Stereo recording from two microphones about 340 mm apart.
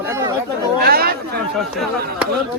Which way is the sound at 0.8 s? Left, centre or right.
Right.